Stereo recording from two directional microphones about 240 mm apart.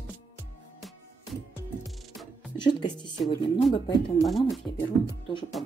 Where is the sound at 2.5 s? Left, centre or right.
Centre.